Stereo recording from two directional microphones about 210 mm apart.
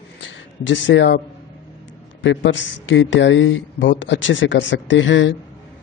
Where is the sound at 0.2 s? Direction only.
60° left (ahead or behind).